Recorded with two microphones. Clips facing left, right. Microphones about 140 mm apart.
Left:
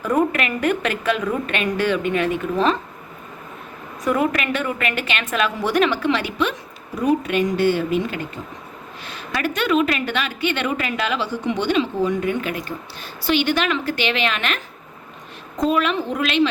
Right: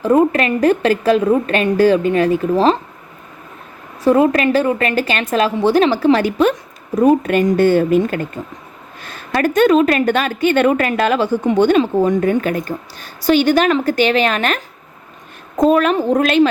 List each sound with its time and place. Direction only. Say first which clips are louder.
0.0 s a woman's voice: right 7 dB; 30° right (ahead or behind)
4.0 s a woman's voice: right 8 dB; 30° right (ahead or behind)